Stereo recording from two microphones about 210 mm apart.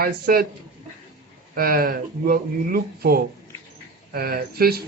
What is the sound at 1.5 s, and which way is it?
Speech, 45° right (ahead or behind).